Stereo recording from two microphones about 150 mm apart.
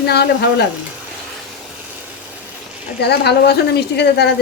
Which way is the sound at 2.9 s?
90° left.